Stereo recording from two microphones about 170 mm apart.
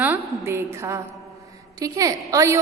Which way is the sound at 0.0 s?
15° right (ahead or behind).